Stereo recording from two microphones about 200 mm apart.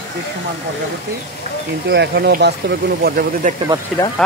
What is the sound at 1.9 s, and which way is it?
Speech, 55° right (ahead or behind).